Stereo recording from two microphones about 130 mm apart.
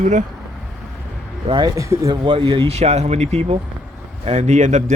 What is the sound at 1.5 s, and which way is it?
Speech, 35° right (ahead or behind).